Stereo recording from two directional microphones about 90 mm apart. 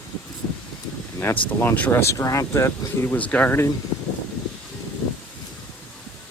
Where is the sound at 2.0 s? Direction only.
35° left (ahead or behind).